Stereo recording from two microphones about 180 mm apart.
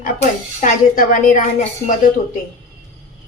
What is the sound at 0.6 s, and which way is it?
A woman's voice, 45° left (ahead or behind).